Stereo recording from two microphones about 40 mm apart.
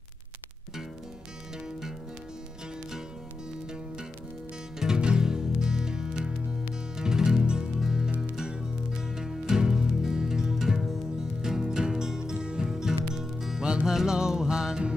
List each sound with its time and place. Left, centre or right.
4.7 s music: centre